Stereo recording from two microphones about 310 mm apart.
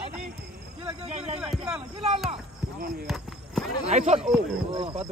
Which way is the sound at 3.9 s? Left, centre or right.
Right.